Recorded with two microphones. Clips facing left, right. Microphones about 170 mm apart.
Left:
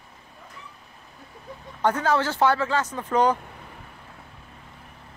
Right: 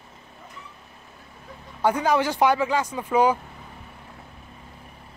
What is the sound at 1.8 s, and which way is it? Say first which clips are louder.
Speech: right 1 dB; 15° right (ahead or behind).